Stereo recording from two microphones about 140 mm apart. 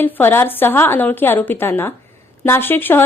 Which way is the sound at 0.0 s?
15° left (ahead or behind).